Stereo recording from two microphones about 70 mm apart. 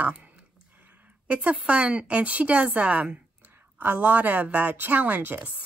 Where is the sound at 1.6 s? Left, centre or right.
Centre.